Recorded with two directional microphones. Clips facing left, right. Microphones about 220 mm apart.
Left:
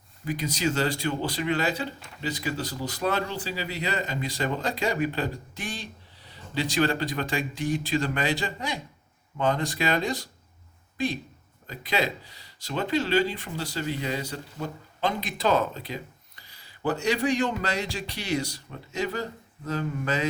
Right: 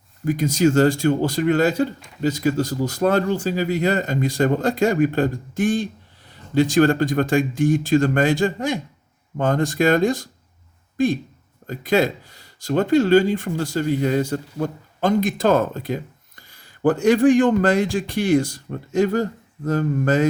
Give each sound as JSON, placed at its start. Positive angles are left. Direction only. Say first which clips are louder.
{"t": 0.3, "sound": "speech", "louder": "right 10 dB", "side_deg": -45}